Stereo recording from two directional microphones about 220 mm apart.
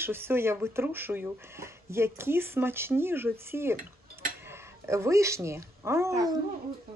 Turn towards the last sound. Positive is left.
turn(degrees=-15)  # may be behind; listen again after turning